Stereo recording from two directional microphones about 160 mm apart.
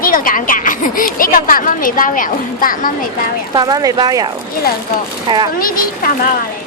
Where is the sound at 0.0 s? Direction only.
60° left (ahead or behind).